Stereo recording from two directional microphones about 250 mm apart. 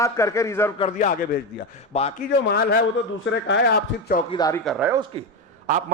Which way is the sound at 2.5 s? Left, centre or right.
Left.